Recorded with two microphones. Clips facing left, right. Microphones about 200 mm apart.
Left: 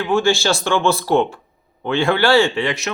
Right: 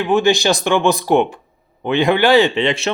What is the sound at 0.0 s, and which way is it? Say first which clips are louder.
Speech: right 2 dB; 20° right (ahead or behind).